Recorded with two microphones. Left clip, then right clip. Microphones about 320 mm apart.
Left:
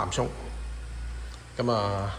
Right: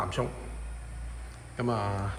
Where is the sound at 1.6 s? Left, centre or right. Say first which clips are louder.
Left 5 dB; centre.